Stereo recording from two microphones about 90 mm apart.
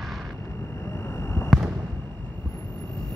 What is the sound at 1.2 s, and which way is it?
Fireworks, 25° left (ahead or behind).